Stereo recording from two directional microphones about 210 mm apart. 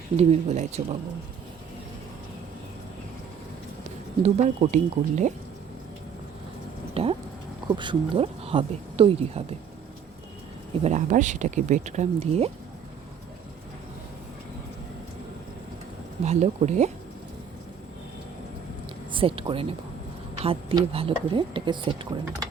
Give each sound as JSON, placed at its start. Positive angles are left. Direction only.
{"t": 0.2, "sound": "speech", "side_deg": -30}
{"t": 4.2, "sound": "speech", "side_deg": -30}
{"t": 6.9, "sound": "speech", "side_deg": -25}
{"t": 10.8, "sound": "speech", "side_deg": -35}
{"t": 16.2, "sound": "speech", "side_deg": -30}
{"t": 19.1, "sound": "speech", "side_deg": -25}